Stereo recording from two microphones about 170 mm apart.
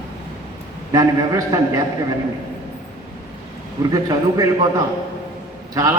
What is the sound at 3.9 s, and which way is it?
Speech, 20° right (ahead or behind).